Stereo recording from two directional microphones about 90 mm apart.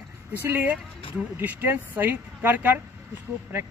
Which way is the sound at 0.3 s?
20° right (ahead or behind).